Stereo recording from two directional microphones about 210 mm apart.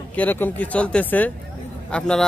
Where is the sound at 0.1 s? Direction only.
10° left (ahead or behind).